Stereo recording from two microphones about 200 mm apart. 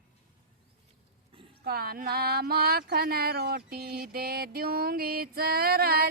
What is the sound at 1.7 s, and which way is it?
Speech, 50° right (ahead or behind).